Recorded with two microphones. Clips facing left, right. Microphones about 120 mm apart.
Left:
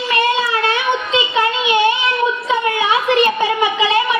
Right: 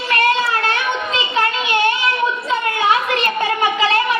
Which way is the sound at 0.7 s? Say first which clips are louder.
Left 3 dB; 20° left (ahead or behind).